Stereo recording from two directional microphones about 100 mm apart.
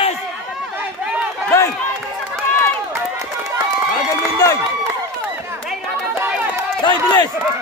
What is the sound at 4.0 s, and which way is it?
Run, 35° left (ahead or behind).